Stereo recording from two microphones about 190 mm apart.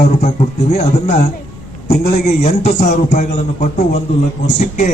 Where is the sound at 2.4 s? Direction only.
35° left (ahead or behind).